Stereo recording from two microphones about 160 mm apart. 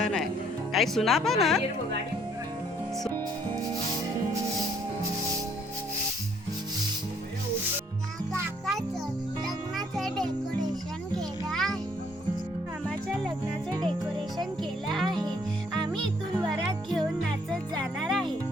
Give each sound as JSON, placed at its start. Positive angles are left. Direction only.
{"t": 0.7, "sound": "speech", "side_deg": 0}
{"t": 9.7, "sound": "music", "side_deg": 0}
{"t": 11.5, "sound": "music", "side_deg": 0}
{"t": 13.7, "sound": "music", "side_deg": -25}
{"t": 14.6, "sound": "music", "side_deg": 0}
{"t": 17.5, "sound": "music", "side_deg": 5}